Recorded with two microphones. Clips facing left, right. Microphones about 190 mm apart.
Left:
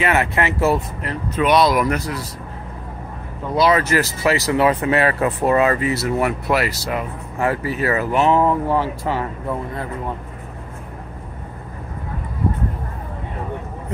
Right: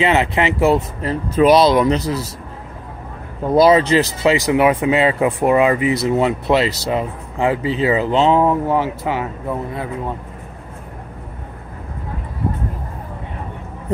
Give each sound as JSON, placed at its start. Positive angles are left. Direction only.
{"t": 0.0, "sound": "speech", "side_deg": -20}
{"t": 1.0, "sound": "speech", "side_deg": -30}
{"t": 3.7, "sound": "speech", "side_deg": -20}
{"t": 9.0, "sound": "speech", "side_deg": -10}